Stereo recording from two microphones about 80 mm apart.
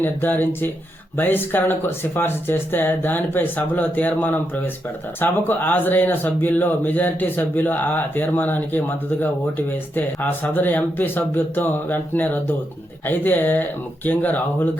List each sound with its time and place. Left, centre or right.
0.0 s speech: left